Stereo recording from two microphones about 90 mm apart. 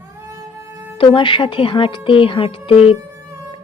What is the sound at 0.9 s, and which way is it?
Speech, 70° left (ahead or behind).